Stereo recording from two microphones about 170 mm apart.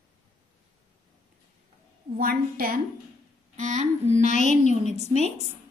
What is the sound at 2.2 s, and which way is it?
Speech, 60° right (ahead or behind).